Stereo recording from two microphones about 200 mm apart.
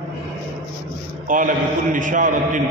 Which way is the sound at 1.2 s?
40° right (ahead or behind).